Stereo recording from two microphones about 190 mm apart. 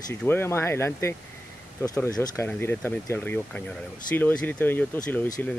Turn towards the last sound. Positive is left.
turn(degrees=5)  # may be behind; listen again after turning